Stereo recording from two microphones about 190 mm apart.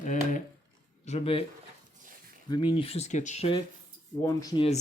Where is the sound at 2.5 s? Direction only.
25° left (ahead or behind).